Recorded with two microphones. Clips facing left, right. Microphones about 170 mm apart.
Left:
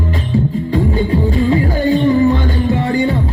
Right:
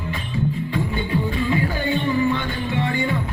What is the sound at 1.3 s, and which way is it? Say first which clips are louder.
Music: left 8 dB; 35° left (ahead or behind).